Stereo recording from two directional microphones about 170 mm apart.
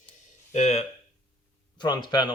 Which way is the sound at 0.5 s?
40° left (ahead or behind).